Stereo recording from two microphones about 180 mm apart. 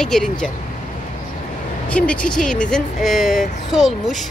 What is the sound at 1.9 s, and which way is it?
Speech, 5° left (ahead or behind).